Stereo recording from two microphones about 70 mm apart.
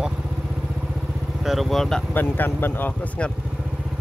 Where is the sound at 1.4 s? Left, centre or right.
Centre.